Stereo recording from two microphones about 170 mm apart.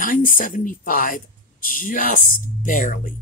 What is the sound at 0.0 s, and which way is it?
Speech, 50° left (ahead or behind).